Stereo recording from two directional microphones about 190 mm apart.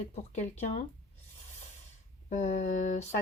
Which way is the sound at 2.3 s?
40° left (ahead or behind).